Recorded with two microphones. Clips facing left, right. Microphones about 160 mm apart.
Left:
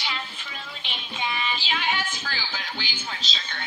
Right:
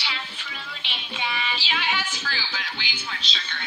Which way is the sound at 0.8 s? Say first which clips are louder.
Left 1 dB; 45° left (ahead or behind).